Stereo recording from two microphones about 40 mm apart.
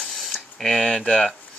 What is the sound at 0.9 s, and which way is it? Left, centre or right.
Speech, left.